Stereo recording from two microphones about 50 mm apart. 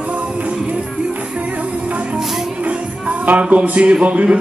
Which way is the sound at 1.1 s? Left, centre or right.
Right.